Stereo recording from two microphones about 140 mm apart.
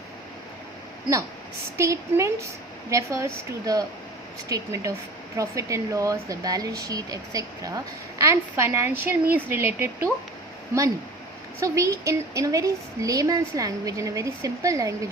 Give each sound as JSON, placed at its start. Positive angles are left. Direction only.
{"t": 1.8, "sound": "speech", "side_deg": -20}
{"t": 4.4, "sound": "a woman's voice", "side_deg": -25}
{"t": 11.6, "sound": "speech", "side_deg": -20}